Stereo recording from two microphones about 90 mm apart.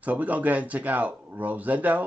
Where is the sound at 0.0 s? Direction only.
15° right (ahead or behind).